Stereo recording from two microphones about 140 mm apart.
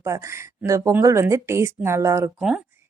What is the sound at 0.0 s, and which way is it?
A woman's voice, 20° right (ahead or behind).